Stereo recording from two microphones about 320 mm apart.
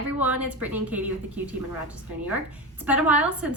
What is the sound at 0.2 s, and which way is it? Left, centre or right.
Speech, centre.